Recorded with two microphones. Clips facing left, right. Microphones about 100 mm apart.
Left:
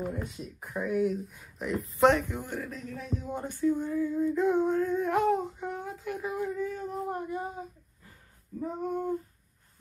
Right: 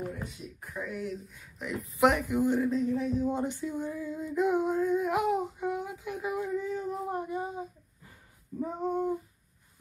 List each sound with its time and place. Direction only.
0.2 s speech: 5° left (ahead or behind); by 9.1 s 15° right (ahead or behind)